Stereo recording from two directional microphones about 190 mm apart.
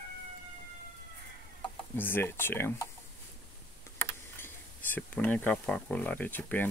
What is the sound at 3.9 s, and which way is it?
Speech, 10° left (ahead or behind).